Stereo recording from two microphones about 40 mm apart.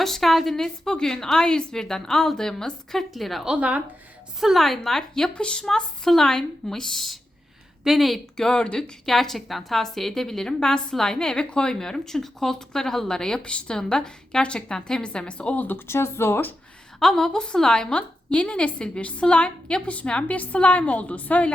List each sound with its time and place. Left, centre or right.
0.0 s a woman's voice: centre
5.3 s a woman's voice: left
5.6 s a woman's voice: centre
8.4 s a woman's voice: centre
9.0 s a woman's voice: centre
13.4 s a woman's voice: left
13.7 s a woman's voice: centre
14.8 s a woman's voice: centre
15.5 s speech: left
15.9 s speech: left
17.0 s a woman's voice: centre; by 21.5 s left